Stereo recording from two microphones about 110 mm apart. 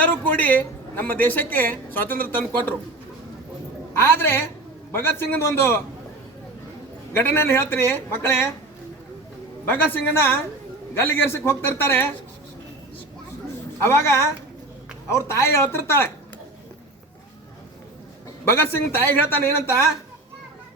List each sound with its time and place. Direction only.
0.0 s a woman's voice: 15° left (ahead or behind)
3.9 s speech: 20° left (ahead or behind)
7.1 s speech: 20° left (ahead or behind)
9.6 s speech: 20° left (ahead or behind)
13.8 s speech: 25° left (ahead or behind)
18.4 s speech: 20° left (ahead or behind)